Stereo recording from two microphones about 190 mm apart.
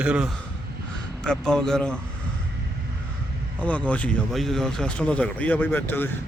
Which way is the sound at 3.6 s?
5° left (ahead or behind).